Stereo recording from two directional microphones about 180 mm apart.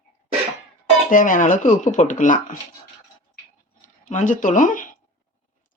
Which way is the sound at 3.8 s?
45° left (ahead or behind).